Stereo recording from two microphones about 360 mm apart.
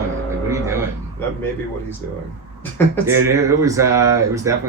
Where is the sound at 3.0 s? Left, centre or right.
Centre.